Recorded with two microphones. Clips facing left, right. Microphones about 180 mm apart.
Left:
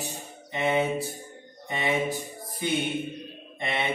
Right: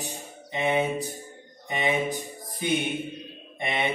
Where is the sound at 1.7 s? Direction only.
20° right (ahead or behind).